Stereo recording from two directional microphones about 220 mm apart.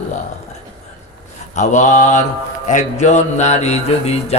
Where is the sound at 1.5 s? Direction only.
35° left (ahead or behind).